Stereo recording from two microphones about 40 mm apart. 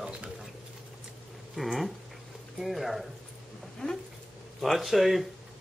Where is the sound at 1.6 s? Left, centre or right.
Centre.